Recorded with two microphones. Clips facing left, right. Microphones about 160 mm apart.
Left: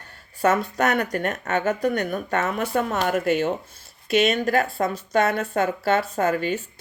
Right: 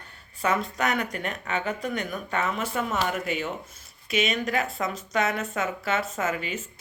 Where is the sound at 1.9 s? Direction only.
60° left (ahead or behind).